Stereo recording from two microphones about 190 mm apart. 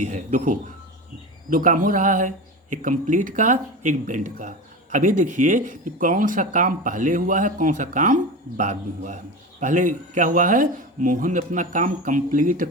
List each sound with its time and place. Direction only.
0.0 s speech: 40° right (ahead or behind)